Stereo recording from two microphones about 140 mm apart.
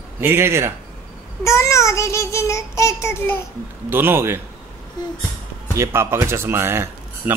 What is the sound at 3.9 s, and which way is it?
Speech, 15° right (ahead or behind).